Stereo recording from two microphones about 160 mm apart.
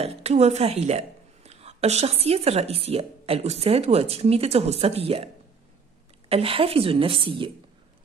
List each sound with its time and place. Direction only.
0.0 s a woman's voice: 40° right (ahead or behind)